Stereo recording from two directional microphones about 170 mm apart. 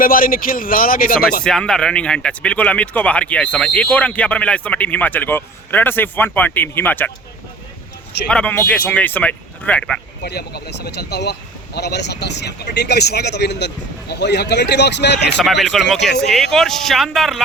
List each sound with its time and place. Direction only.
0.0 s speech: 55° left (ahead or behind)
1.5 s speech: 5° left (ahead or behind)
8.3 s speech: 5° left (ahead or behind)
10.2 s speech: 75° left (ahead or behind)
15.4 s speech: centre (ahead or behind)